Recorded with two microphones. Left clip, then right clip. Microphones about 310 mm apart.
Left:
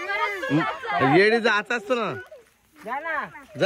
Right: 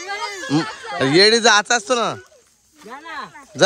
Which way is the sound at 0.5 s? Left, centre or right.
Centre.